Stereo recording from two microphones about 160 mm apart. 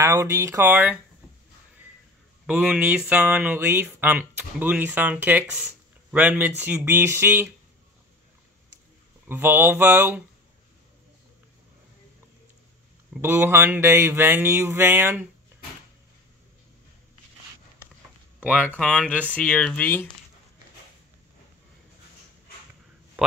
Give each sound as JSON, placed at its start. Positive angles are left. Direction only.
{"t": 0.0, "sound": "speech", "side_deg": -20}
{"t": 2.4, "sound": "speech", "side_deg": -10}
{"t": 9.3, "sound": "speech", "side_deg": -10}
{"t": 13.1, "sound": "speech", "side_deg": -10}
{"t": 18.8, "sound": "speech", "side_deg": 5}
{"t": 23.2, "sound": "speech", "side_deg": -10}